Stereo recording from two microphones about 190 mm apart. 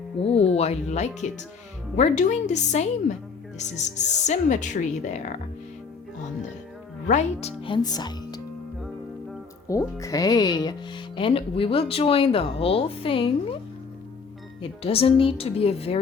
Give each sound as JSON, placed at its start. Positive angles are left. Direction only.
{"t": 0.2, "sound": "speech", "side_deg": 30}
{"t": 7.1, "sound": "speech", "side_deg": 35}
{"t": 9.6, "sound": "speech", "side_deg": 15}
{"t": 14.6, "sound": "speech", "side_deg": 30}